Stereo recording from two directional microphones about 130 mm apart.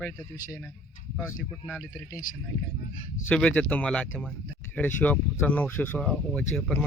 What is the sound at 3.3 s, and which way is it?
Speech, 10° left (ahead or behind).